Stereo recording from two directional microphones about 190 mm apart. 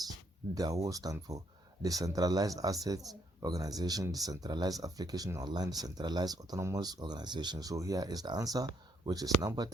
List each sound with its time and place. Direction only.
0.5 s speech: 20° right (ahead or behind)